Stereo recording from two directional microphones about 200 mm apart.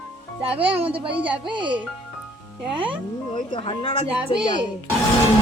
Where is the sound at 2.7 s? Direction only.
25° right (ahead or behind).